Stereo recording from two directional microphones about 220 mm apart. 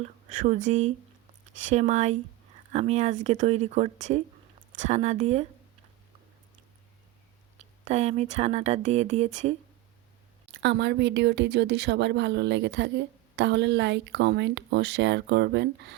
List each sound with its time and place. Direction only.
0.0 s speech: 35° right (ahead or behind)
7.6 s speech: 30° right (ahead or behind)
10.5 s speech: 50° right (ahead or behind)